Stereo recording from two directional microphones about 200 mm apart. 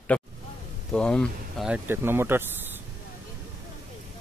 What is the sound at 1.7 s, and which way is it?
Speech, 10° right (ahead or behind).